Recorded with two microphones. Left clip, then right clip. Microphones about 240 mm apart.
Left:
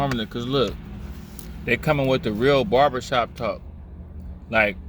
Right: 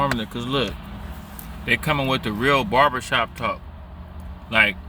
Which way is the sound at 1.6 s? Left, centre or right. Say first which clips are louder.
Even; right.